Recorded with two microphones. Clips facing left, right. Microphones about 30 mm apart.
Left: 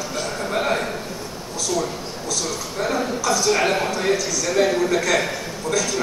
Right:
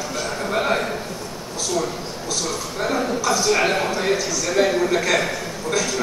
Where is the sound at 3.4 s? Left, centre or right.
Centre.